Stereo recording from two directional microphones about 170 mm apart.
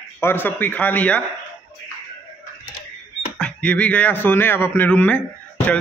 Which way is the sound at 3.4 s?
5° left (ahead or behind).